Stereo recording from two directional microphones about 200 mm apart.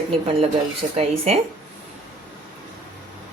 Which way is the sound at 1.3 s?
30° right (ahead or behind).